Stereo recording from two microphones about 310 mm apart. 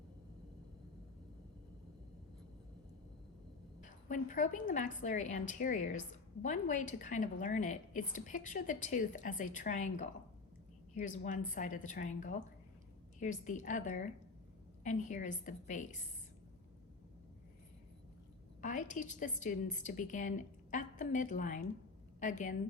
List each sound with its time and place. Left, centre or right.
3.8 s a woman's voice: left
18.6 s a woman's voice: left